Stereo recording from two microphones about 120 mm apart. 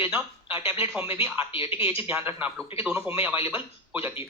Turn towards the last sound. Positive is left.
turn(degrees=-20)  # may be behind; listen again after turning